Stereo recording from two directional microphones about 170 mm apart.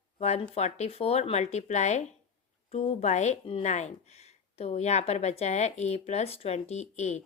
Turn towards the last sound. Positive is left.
turn(degrees=40)  # may be behind; listen again after turning